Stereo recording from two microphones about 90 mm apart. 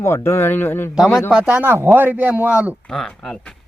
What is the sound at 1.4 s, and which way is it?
A man's voice, 20° right (ahead or behind).